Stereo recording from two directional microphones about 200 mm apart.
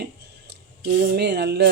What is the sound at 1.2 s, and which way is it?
Speech, 55° right (ahead or behind).